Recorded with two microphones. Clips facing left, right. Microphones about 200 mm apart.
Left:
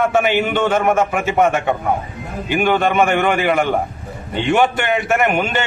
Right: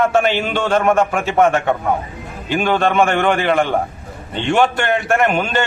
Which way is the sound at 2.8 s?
5° left (ahead or behind).